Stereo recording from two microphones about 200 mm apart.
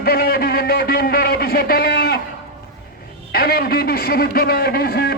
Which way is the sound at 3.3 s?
50° left (ahead or behind).